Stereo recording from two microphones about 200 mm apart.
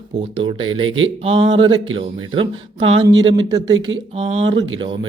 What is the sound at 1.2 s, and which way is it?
Speech, 25° right (ahead or behind).